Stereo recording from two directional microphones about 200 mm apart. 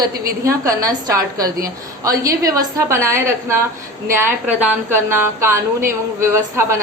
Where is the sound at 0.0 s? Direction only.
15° right (ahead or behind).